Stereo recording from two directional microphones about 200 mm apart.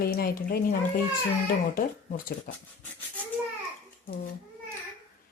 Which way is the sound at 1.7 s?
45° left (ahead or behind).